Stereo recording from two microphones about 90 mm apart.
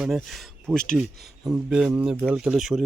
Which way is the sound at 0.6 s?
10° left (ahead or behind).